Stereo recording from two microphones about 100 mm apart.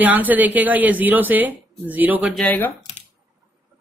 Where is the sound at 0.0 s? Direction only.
15° right (ahead or behind).